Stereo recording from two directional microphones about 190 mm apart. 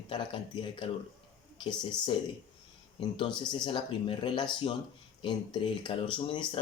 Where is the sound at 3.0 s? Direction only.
25° left (ahead or behind).